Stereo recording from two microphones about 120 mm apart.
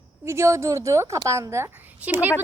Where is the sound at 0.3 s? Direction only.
25° right (ahead or behind).